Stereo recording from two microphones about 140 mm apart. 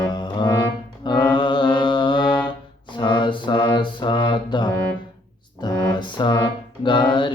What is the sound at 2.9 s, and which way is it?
Mantra, 35° left (ahead or behind).